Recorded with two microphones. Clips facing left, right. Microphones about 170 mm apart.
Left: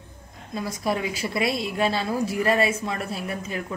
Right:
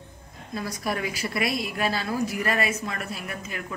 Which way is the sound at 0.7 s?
20° left (ahead or behind).